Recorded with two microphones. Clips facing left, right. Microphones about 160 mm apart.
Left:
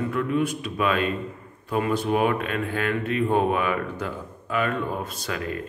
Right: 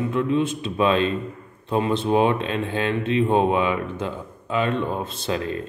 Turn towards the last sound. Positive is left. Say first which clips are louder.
# right 4 dB
turn(degrees=-25)  # may be behind; listen again after turning